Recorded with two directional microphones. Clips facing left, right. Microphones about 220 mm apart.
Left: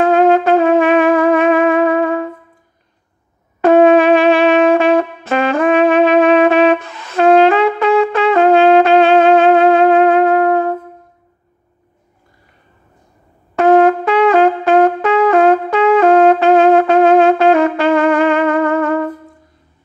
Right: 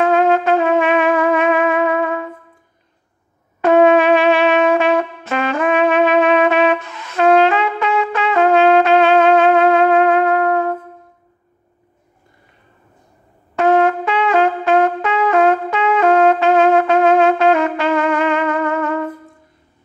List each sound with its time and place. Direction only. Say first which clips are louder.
0.2 s trumpet: left 4 dB; 40° left (ahead or behind)
3.6 s brass instrument: left 3 dB; 35° left (ahead or behind)
13.6 s trumpet: left 4 dB; 40° left (ahead or behind)